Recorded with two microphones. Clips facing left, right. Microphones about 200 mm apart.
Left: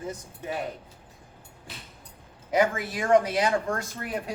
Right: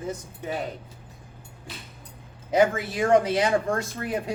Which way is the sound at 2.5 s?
25° right (ahead or behind).